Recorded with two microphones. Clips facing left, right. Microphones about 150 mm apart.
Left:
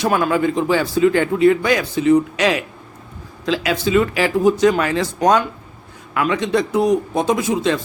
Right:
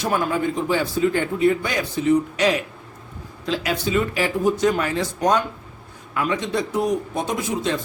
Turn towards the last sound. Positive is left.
turn(degrees=90)